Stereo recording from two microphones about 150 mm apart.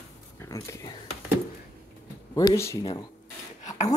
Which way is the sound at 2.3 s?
20° left (ahead or behind).